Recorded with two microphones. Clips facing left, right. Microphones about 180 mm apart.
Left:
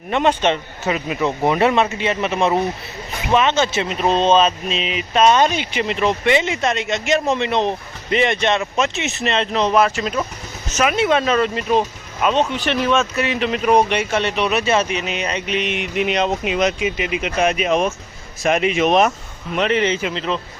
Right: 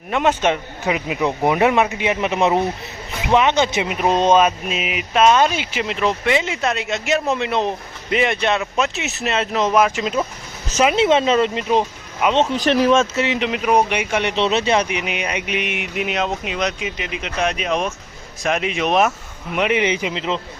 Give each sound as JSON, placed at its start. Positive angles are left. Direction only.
{"t": 0.1, "sound": "speech", "side_deg": -5}
{"t": 12.5, "sound": "speech", "side_deg": -35}
{"t": 13.6, "sound": "speech", "side_deg": -10}
{"t": 14.3, "sound": "speech", "side_deg": -25}
{"t": 19.5, "sound": "speech", "side_deg": -10}